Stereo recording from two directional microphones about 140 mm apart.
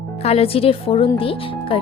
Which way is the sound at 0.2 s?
45° left (ahead or behind).